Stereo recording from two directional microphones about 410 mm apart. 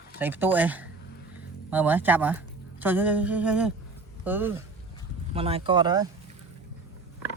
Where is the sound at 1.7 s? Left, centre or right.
Centre.